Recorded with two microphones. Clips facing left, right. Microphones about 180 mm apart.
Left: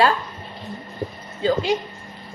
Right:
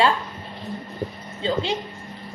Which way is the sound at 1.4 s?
25° right (ahead or behind).